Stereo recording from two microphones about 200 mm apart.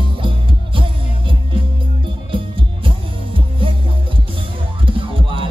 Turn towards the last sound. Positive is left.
turn(degrees=-25)  # may be behind; listen again after turning